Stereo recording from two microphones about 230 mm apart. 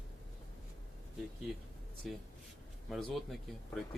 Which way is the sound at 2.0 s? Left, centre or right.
Centre.